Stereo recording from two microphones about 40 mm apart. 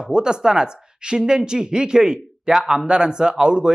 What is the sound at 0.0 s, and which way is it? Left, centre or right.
Speech, right.